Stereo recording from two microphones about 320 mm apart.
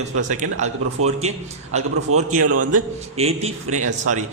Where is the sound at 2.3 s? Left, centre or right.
Right.